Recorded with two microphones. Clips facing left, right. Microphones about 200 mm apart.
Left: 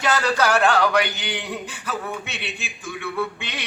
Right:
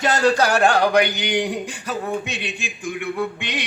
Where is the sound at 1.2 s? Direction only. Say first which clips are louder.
Right 7 dB; 15° right (ahead or behind).